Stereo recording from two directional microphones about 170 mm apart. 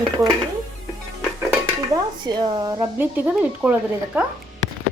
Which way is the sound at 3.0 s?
10° right (ahead or behind).